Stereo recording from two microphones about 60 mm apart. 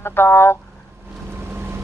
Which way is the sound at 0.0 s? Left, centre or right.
Left.